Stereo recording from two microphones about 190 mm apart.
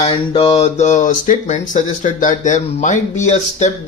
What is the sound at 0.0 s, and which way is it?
Speech, 30° left (ahead or behind).